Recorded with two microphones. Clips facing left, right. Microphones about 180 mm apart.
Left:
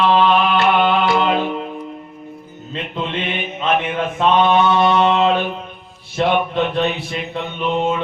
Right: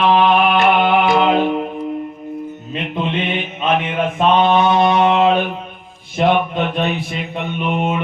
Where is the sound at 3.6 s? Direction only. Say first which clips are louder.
Right 1 dB; 15° right (ahead or behind).